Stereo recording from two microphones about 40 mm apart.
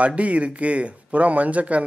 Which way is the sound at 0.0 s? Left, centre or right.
Right.